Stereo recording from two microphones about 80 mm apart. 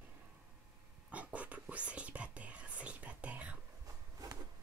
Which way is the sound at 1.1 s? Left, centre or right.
Centre.